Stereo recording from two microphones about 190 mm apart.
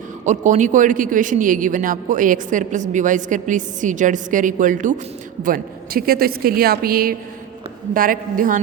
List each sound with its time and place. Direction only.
0.3 s a man's voice: 40° right (ahead or behind)